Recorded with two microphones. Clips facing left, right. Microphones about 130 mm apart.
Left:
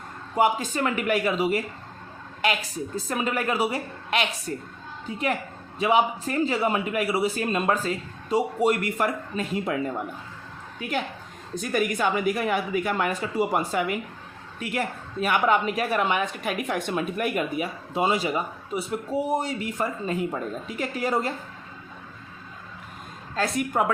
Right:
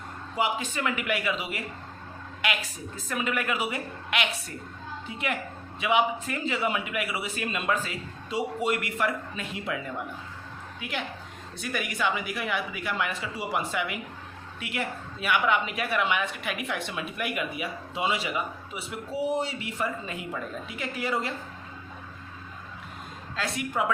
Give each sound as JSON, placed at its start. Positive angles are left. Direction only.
{"t": 0.3, "sound": "speech", "side_deg": 45}
{"t": 2.9, "sound": "a woman's voice", "side_deg": 35}
{"t": 23.3, "sound": "a woman's voice", "side_deg": 45}